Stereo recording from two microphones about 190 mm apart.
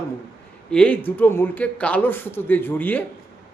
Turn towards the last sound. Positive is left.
turn(degrees=10)  # may be behind; listen again after turning